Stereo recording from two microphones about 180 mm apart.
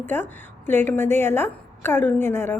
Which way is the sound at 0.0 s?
10° left (ahead or behind).